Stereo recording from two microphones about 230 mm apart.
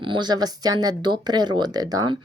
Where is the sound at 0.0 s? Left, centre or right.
Centre.